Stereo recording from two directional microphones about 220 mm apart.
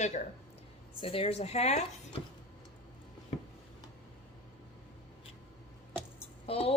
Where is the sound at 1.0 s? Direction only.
25° left (ahead or behind).